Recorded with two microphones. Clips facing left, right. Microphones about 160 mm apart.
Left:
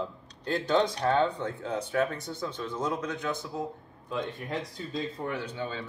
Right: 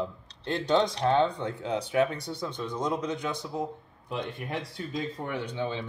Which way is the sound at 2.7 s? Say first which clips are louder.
Right 2 dB; 15° right (ahead or behind).